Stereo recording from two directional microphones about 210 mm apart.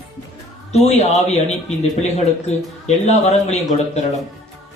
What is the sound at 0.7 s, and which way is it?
A man's voice, 30° left (ahead or behind).